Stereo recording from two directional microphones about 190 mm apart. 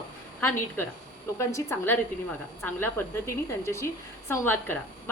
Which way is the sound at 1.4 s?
15° left (ahead or behind).